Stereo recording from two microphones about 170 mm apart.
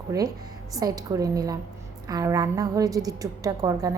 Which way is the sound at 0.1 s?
20° right (ahead or behind).